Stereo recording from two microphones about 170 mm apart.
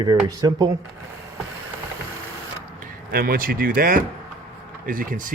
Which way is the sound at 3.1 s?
60° right (ahead or behind).